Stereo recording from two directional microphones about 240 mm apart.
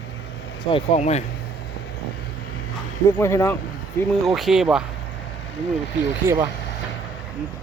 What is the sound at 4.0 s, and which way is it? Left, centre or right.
Speech, centre.